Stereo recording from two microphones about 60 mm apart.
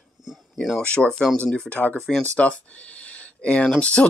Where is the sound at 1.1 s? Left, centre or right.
Centre.